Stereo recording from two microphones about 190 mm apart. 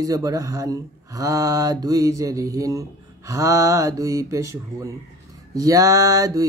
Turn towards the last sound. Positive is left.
turn(degrees=-20)  # may be behind; listen again after turning